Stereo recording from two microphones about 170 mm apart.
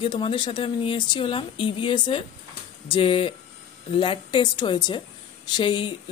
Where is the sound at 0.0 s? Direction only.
30° left (ahead or behind).